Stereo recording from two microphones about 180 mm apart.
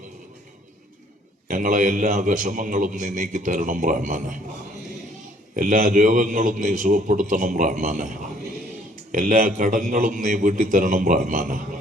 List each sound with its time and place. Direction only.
1.5 s a man's voice: 45° right (ahead or behind)
5.5 s a man's voice: 50° right (ahead or behind)